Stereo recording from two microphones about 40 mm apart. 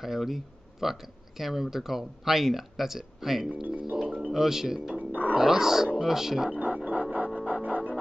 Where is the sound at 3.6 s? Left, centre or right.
Right.